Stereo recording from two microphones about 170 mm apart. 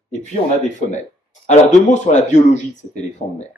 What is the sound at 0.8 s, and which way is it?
Speech, 45° left (ahead or behind).